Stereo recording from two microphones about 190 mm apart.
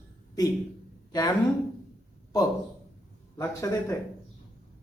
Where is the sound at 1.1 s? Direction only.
20° left (ahead or behind).